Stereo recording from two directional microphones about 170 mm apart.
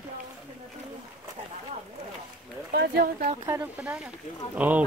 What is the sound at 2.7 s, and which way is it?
Speech, 65° right (ahead or behind).